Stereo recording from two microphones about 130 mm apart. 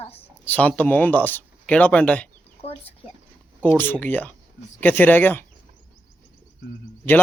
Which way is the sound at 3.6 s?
15° left (ahead or behind).